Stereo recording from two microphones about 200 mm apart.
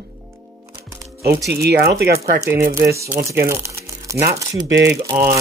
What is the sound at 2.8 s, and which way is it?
Speech, 15° right (ahead or behind).